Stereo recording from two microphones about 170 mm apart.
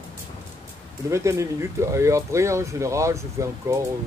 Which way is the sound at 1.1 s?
15° right (ahead or behind).